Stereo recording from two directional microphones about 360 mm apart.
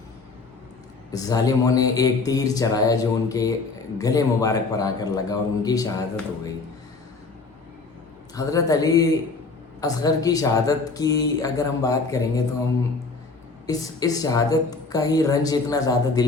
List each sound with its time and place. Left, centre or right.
1.1 s speech: centre
8.4 s speech: centre
13.7 s speech: centre